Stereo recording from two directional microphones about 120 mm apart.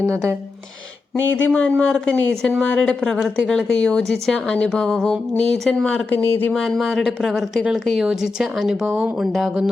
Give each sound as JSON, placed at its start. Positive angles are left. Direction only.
{"t": 0.0, "sound": "speech", "side_deg": -20}
{"t": 1.2, "sound": "a woman's voice", "side_deg": 15}
{"t": 6.5, "sound": "speech", "side_deg": 0}